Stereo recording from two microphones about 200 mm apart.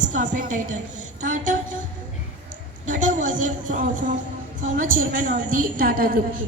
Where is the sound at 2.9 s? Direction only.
40° right (ahead or behind).